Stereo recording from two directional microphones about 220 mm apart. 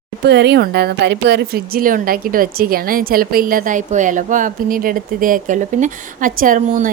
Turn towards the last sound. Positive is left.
turn(degrees=-35)  # may be behind; listen again after turning